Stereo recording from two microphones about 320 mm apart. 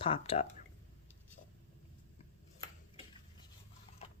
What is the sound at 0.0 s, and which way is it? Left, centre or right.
Speech, centre.